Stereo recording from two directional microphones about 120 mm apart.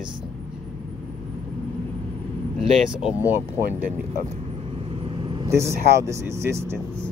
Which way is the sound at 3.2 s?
20° right (ahead or behind).